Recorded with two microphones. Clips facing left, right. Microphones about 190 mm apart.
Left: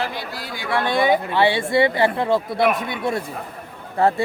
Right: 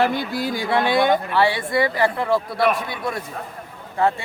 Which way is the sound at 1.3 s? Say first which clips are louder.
Left 1 dB; 25° left (ahead or behind).